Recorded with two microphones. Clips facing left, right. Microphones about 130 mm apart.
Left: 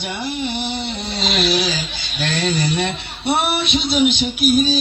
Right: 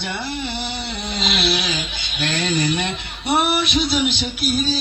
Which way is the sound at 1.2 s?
40° left (ahead or behind).